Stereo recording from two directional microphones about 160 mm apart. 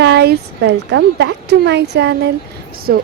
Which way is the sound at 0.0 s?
90° right.